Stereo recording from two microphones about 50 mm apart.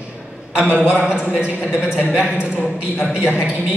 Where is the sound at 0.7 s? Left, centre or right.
Centre.